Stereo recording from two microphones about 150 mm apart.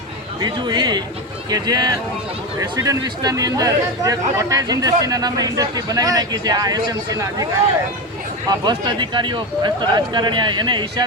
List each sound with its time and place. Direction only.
0.3 s speech: 30° right (ahead or behind)
8.4 s speech: 30° right (ahead or behind)